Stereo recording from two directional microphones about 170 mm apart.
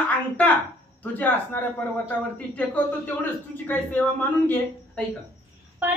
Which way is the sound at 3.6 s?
10° left (ahead or behind).